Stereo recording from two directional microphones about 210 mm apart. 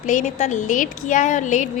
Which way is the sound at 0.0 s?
35° left (ahead or behind).